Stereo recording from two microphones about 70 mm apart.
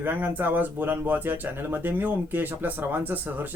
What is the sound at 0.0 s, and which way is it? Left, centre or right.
Speech, right.